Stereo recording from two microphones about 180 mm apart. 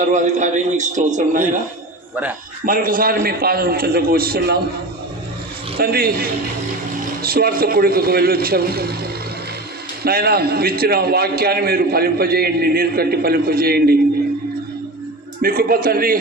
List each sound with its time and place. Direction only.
0.0 s a man's voice: 40° right (ahead or behind)
2.6 s a man's voice: 50° right (ahead or behind)
5.8 s a man's voice: 55° right (ahead or behind)
10.0 s a man's voice: 55° right (ahead or behind)
15.4 s a man's voice: 55° right (ahead or behind)